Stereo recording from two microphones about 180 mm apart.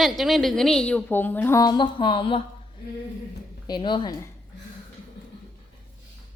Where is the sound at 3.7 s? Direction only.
25° left (ahead or behind).